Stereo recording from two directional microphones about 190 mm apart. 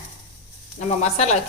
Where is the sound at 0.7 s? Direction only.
35° left (ahead or behind).